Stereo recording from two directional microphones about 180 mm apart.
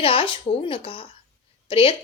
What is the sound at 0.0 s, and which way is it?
A woman's voice, 30° left (ahead or behind).